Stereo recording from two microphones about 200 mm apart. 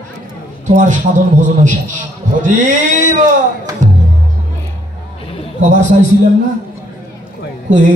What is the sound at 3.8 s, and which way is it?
Music, 35° right (ahead or behind).